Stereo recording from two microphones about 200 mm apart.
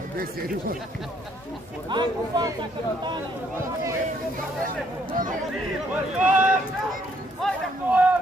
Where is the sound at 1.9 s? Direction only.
20° right (ahead or behind).